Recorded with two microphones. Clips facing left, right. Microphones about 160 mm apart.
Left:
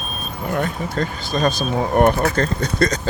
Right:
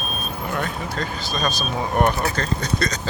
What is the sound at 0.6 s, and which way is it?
Speech, 50° left (ahead or behind).